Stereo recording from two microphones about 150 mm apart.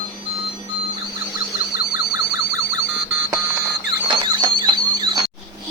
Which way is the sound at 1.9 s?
25° right (ahead or behind).